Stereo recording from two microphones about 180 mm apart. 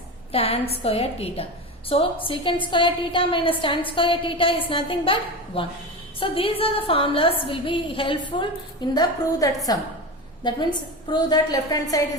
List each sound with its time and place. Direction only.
0.3 s a woman's voice: 30° left (ahead or behind)